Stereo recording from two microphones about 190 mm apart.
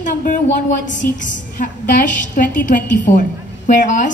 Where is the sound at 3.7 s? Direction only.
40° left (ahead or behind).